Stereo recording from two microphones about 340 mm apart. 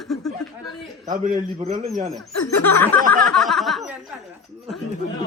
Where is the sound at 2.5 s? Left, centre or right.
Left.